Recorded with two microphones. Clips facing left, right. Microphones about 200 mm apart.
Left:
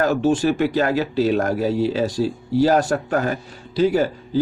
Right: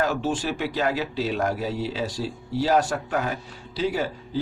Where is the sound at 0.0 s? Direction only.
45° left (ahead or behind).